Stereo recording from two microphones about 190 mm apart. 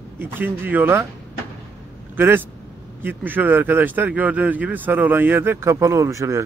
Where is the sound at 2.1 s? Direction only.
10° right (ahead or behind).